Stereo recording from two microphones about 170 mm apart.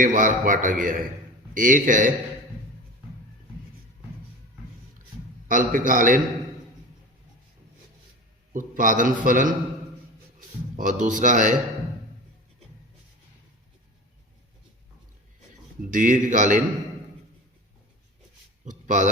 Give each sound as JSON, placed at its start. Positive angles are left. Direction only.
{"t": 0.0, "sound": "a man's voice", "side_deg": -50}
{"t": 5.5, "sound": "a man's voice", "side_deg": -50}
{"t": 8.5, "sound": "a man's voice", "side_deg": -50}
{"t": 10.8, "sound": "a man's voice", "side_deg": -45}
{"t": 15.8, "sound": "a man's voice", "side_deg": -50}
{"t": 18.6, "sound": "a sound", "side_deg": -45}